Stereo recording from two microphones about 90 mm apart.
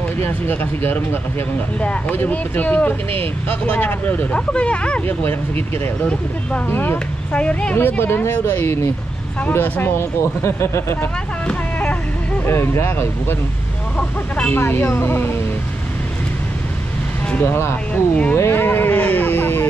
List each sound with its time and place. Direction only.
0.2 s speech: 20° left (ahead or behind)
6.7 s speech: 25° left (ahead or behind)
7.3 s speech: 10° left (ahead or behind)
7.7 s speech: 25° left (ahead or behind)
11.4 s vehicle: 15° left (ahead or behind)
12.4 s speech: 25° left (ahead or behind)
13.9 s speech: 15° left (ahead or behind)
14.5 s speech: 25° left (ahead or behind)
17.4 s speech: 25° left (ahead or behind)